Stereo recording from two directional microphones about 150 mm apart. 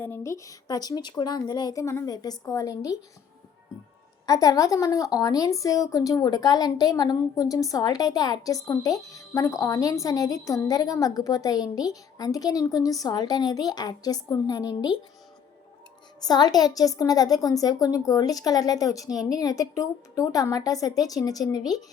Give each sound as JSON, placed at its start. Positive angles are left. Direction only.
{"t": 0.0, "sound": "a woman's voice", "side_deg": 15}
{"t": 4.3, "sound": "a woman's voice", "side_deg": 25}
{"t": 16.2, "sound": "a woman's voice", "side_deg": 25}